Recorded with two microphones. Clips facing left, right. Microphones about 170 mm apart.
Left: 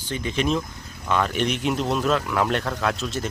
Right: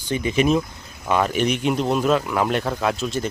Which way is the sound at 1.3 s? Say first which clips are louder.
Right 3 dB; 5° right (ahead or behind).